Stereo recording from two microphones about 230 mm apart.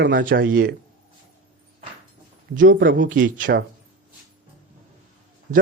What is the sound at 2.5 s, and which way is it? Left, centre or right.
Speech, right.